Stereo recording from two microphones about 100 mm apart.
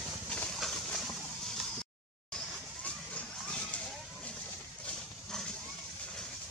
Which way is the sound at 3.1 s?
10° left (ahead or behind).